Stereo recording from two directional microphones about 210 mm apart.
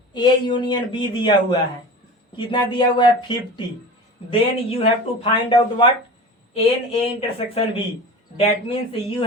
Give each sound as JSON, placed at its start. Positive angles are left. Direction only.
{"t": 0.1, "sound": "speech", "side_deg": 20}